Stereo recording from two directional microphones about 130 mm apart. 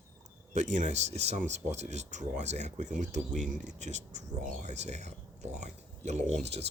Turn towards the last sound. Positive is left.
turn(degrees=-55)  # may be behind; listen again after turning